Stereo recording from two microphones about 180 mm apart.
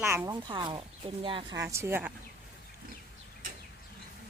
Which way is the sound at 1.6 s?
15° right (ahead or behind).